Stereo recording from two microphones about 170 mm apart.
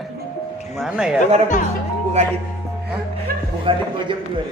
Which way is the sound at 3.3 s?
60° right (ahead or behind).